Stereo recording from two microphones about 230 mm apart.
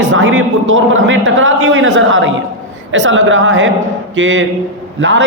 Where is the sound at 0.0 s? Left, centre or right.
Right.